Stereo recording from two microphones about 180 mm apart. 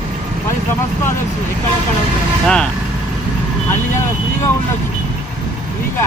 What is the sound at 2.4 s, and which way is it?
Speech, 5° left (ahead or behind).